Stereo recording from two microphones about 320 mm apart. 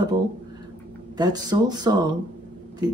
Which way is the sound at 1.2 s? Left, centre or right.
Centre.